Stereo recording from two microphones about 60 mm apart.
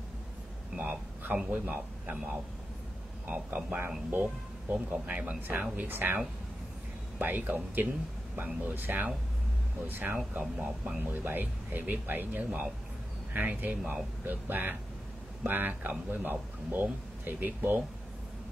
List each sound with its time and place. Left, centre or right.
0.7 s a sound: right
1.5 s speech: right
10.1 s speech: centre
11.0 s speech: right